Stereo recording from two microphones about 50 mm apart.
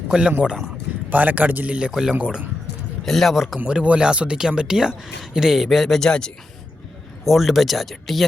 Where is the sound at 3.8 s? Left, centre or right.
Right; by 6.0 s centre.